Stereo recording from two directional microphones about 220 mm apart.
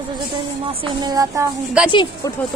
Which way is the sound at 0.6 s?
20° right (ahead or behind).